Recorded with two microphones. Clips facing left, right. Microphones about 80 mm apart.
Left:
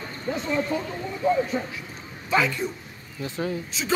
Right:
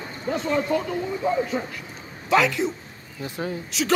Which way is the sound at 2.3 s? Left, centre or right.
Right.